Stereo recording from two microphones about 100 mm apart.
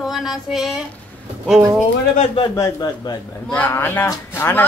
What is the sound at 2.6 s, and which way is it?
Speech, 40° left (ahead or behind).